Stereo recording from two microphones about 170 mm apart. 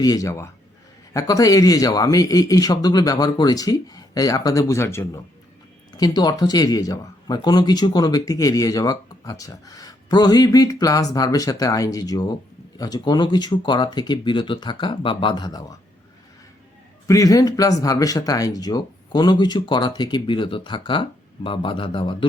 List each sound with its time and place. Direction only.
0.0 s speech: 20° left (ahead or behind)
17.1 s speech: 20° left (ahead or behind)